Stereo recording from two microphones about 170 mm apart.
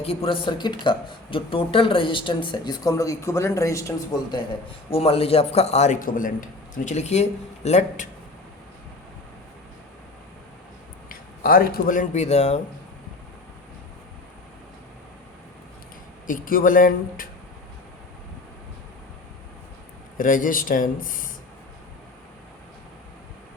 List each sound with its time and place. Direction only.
0.0 s speech: 35° left (ahead or behind)
4.9 s a man's voice: 35° left (ahead or behind)
11.1 s speech: 55° left (ahead or behind); by 12.5 s 40° left (ahead or behind)
16.2 s speech: 55° left (ahead or behind)
20.1 s speech: 50° left (ahead or behind)